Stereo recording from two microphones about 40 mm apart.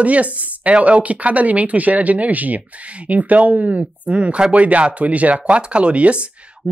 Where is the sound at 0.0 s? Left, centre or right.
Right.